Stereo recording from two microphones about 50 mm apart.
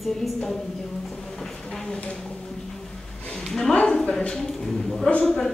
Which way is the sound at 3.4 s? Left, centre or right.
Centre.